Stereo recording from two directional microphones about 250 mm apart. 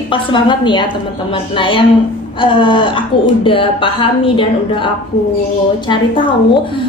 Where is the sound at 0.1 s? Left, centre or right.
Centre.